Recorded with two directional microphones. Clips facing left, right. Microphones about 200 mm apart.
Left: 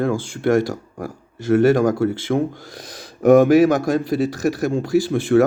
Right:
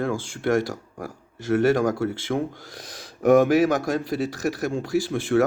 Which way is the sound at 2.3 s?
45° left (ahead or behind).